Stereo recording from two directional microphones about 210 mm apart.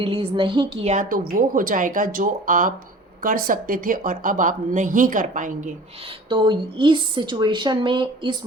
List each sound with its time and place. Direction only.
0.0 s a woman's voice: 25° right (ahead or behind)
6.2 s a woman's voice: 20° right (ahead or behind)